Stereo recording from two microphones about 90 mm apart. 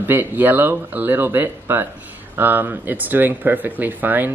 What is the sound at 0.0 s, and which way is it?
Speech, 20° right (ahead or behind).